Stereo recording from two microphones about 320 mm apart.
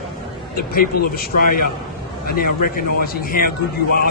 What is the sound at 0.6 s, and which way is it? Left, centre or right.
A man's voice, left.